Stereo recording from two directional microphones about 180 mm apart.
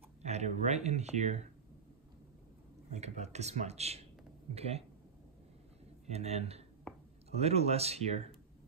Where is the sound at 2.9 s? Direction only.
40° right (ahead or behind).